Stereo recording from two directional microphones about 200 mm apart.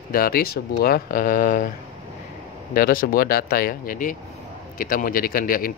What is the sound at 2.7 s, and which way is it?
A man's voice, 45° left (ahead or behind).